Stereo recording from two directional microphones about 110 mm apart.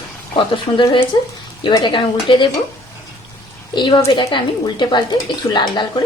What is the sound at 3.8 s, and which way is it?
A woman's voice, 45° left (ahead or behind).